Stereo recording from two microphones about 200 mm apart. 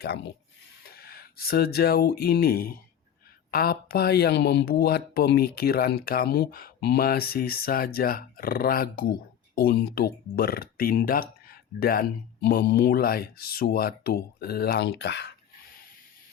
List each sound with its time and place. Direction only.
0.9 s speech: 50° left (ahead or behind)